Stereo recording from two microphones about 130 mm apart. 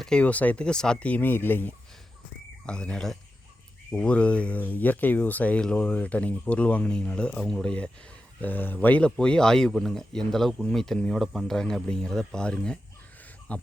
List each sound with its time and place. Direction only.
0.0 s speech: 10° left (ahead or behind)